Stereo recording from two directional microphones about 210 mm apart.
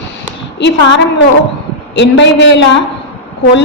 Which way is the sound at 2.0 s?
55° left (ahead or behind).